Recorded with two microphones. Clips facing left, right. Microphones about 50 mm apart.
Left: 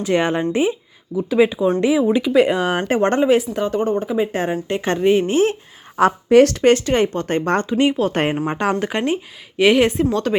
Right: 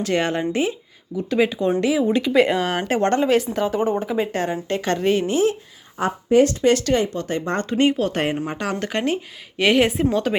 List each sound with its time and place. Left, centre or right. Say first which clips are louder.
0.0 s speech: left 3 dB; centre
2.9 s speech: left 2 dB; left
3.2 s speech: left 2 dB; centre
4.3 s speech: left 2 dB; left
4.9 s speech: left 6 dB; centre
5.2 s speech: left 2 dB; left
6.0 s speech: left 5 dB; left
6.9 s speech: left 3 dB; left
7.7 s speech: right 2 dB; centre
8.3 s speech: left 5 dB; left
8.7 s speech: left 3 dB; centre